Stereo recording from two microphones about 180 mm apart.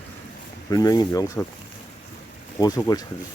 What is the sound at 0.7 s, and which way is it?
Speech, 20° left (ahead or behind).